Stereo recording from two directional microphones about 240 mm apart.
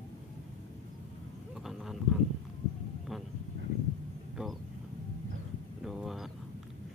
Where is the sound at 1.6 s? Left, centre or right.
Centre.